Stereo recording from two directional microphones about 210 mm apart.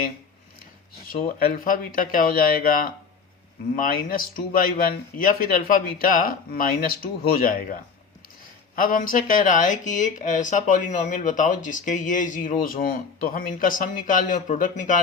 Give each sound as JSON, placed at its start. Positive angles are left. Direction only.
{"t": 1.2, "sound": "speech", "side_deg": 45}